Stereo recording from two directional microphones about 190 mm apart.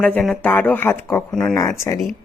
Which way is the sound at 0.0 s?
5° left (ahead or behind).